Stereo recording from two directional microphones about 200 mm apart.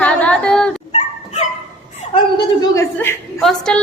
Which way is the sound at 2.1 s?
20° left (ahead or behind).